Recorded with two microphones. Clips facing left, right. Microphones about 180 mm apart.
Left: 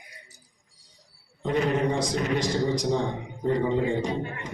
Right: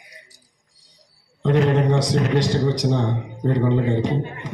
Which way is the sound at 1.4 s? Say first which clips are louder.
Right 6 dB; 85° right.